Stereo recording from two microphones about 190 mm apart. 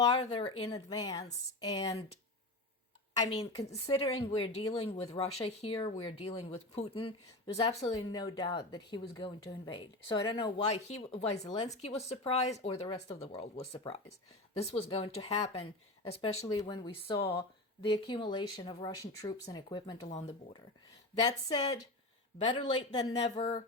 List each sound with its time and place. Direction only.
0.0 s speech: 25° left (ahead or behind)
3.2 s speech: 30° left (ahead or behind)
21.2 s speech: 20° left (ahead or behind)
23.3 s speech: 35° left (ahead or behind)